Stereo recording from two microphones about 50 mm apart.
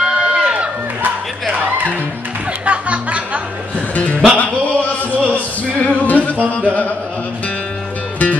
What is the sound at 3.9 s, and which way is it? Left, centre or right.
Music, left.